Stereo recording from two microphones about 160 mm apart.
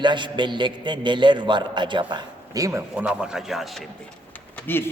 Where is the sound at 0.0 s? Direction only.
30° right (ahead or behind).